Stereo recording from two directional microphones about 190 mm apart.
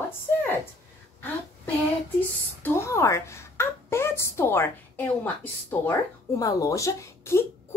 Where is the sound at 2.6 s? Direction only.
15° left (ahead or behind).